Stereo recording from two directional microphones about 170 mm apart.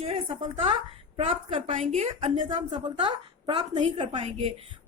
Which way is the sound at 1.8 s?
40° right (ahead or behind).